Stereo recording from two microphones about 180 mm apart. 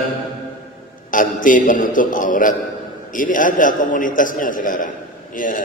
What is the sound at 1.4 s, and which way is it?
A man's voice, 45° left (ahead or behind).